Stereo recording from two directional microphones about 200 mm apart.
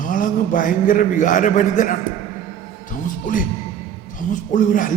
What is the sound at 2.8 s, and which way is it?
Music, 40° left (ahead or behind).